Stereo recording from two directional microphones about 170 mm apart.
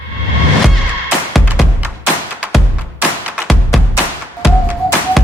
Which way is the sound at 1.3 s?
Centre (ahead or behind).